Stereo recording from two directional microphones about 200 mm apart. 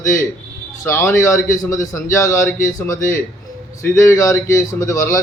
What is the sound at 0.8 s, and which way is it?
A man's voice, 15° left (ahead or behind).